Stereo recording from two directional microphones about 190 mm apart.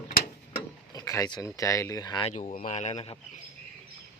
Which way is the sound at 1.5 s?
15° left (ahead or behind).